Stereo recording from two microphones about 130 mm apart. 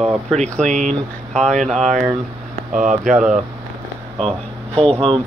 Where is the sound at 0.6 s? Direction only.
70° right (ahead or behind).